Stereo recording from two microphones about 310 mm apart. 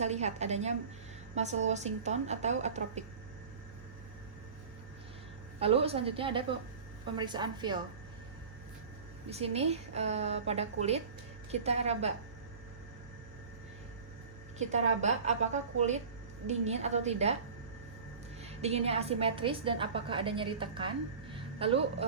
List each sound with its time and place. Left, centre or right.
0.0 s a woman's voice: right
5.5 s a woman's voice: centre
9.3 s a woman's voice: centre
14.6 s a woman's voice: right
18.4 s a woman's voice: centre
21.3 s music: centre